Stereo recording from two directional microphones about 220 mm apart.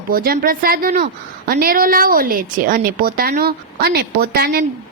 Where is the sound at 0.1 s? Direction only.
40° right (ahead or behind).